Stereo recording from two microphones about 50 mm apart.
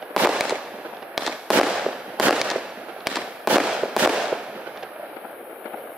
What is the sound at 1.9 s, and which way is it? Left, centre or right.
Fireworks, right.